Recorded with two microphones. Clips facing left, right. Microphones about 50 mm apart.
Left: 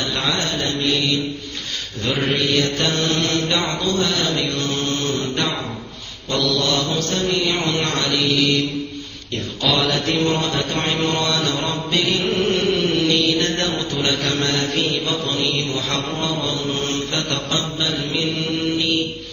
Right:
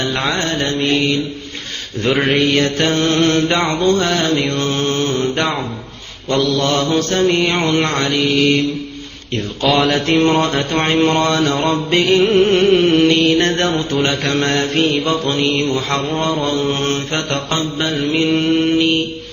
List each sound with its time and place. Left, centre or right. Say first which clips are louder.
0.1 s mantra: right 4 dB; right
2.1 s mantra: right 4 dB; right